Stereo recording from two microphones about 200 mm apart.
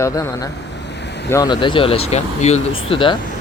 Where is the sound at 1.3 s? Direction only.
20° left (ahead or behind).